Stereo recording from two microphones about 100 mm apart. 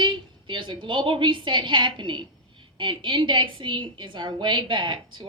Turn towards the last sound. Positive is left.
turn(degrees=-55)  # may be behind; listen again after turning